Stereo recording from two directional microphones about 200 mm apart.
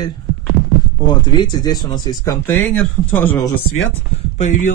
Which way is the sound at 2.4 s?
10° left (ahead or behind).